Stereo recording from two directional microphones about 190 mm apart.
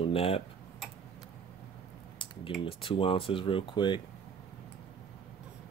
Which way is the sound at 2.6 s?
30° left (ahead or behind).